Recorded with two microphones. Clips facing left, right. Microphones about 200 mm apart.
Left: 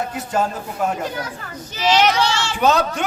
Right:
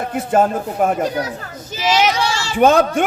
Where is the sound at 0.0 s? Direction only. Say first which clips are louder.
Right 6 dB; 55° right (ahead or behind).